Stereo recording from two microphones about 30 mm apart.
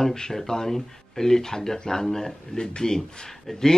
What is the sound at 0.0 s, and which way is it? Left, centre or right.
Speech, left.